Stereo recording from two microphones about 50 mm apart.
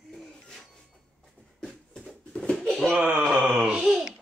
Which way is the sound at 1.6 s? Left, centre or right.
Centre.